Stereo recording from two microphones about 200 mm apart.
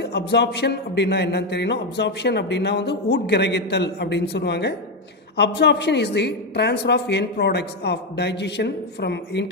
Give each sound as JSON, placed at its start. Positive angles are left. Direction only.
{"t": 0.0, "sound": "speech", "side_deg": 55}